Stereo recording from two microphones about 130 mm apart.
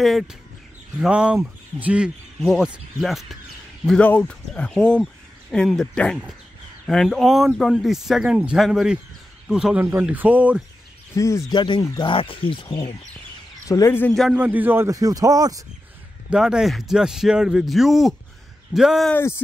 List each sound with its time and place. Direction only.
0.0 s speech: centre (ahead or behind)
11.1 s speech: 25° left (ahead or behind)
11.5 s speech: 35° left (ahead or behind)
11.8 s speech: 25° left (ahead or behind)
12.1 s speech: 45° left (ahead or behind)
13.7 s speech: 20° left (ahead or behind)
14.3 s speech: 15° right (ahead or behind)
14.9 s a man's voice: 25° right (ahead or behind)
16.3 s speech: 5° right (ahead or behind)
19.1 s speech: 20° left (ahead or behind)